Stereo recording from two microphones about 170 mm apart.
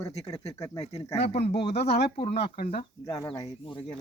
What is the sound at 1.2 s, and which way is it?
Speech, 35° left (ahead or behind).